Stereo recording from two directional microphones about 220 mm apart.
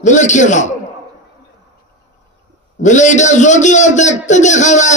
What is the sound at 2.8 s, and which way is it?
A man's voice, 35° left (ahead or behind).